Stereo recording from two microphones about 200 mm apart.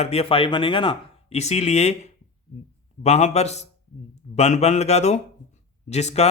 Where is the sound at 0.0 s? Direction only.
30° left (ahead or behind).